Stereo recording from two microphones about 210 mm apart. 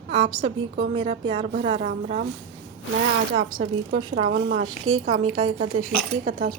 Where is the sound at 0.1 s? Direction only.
25° right (ahead or behind).